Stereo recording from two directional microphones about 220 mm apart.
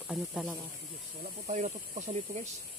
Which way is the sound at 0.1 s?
Centre (ahead or behind).